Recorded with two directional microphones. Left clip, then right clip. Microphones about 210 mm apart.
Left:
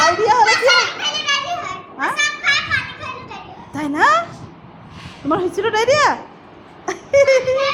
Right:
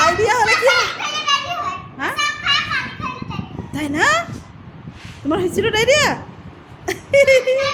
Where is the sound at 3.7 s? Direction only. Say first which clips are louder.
Left 2 dB; 15° right (ahead or behind).